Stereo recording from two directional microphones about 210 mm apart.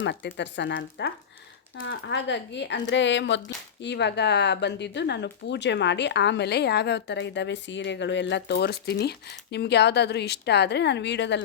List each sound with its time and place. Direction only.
0.0 s speech: 55° left (ahead or behind)